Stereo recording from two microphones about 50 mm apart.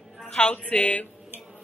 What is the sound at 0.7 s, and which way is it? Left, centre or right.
Speech, left.